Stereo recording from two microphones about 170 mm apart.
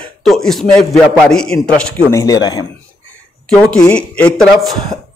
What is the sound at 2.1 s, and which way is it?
Speech, 20° left (ahead or behind).